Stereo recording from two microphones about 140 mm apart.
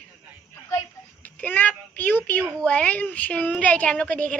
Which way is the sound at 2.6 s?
10° left (ahead or behind).